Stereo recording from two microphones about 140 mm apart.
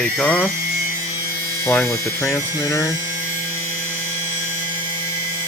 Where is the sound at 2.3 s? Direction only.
25° left (ahead or behind).